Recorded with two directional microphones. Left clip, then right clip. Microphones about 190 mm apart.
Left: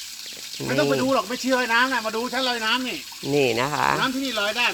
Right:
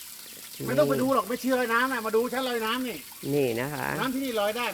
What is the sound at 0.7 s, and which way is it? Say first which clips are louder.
Speech: left 2 dB; 20° right (ahead or behind).